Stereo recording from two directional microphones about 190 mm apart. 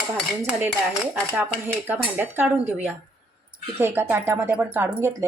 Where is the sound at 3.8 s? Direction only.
10° right (ahead or behind).